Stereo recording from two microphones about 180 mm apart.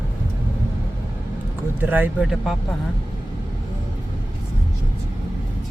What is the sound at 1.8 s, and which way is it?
Speech, 10° right (ahead or behind).